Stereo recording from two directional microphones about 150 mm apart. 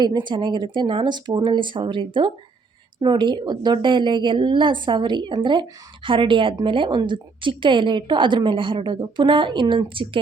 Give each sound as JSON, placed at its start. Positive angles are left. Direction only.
{"t": 0.0, "sound": "a woman's voice", "side_deg": -30}